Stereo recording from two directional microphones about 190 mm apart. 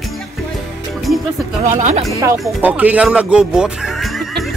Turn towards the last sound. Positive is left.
turn(degrees=0)  # may be behind; listen again after turning